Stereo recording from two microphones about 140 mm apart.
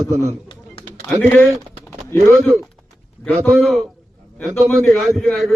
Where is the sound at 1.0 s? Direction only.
15° left (ahead or behind).